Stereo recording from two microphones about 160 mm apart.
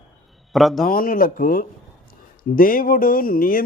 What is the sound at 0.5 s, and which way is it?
Speech, centre (ahead or behind).